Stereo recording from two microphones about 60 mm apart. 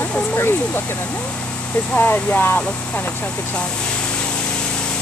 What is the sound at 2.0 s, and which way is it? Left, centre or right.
Speech, left.